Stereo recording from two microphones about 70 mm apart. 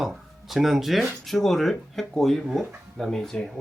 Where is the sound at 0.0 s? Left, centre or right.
Centre.